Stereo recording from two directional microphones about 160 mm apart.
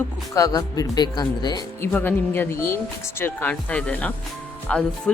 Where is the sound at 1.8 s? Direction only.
10° left (ahead or behind).